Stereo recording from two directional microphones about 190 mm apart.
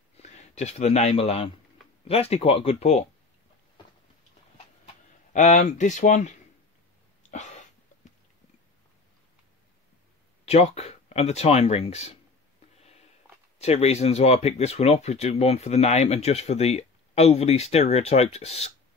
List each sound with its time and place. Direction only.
0.2 s speech: 35° left (ahead or behind)
5.3 s speech: 40° left (ahead or behind)
7.2 s a sound: 40° left (ahead or behind)
10.4 s speech: 35° left (ahead or behind)
13.6 s speech: 35° left (ahead or behind)